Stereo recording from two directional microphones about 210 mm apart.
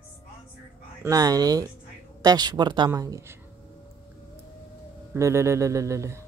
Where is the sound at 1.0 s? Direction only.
15° right (ahead or behind).